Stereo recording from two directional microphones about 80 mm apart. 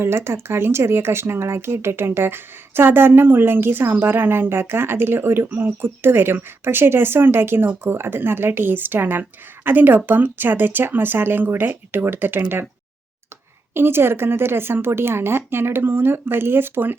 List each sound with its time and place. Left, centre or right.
0.0 s speech: right
13.7 s speech: right